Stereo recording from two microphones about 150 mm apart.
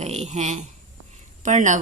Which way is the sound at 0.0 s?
45° right (ahead or behind).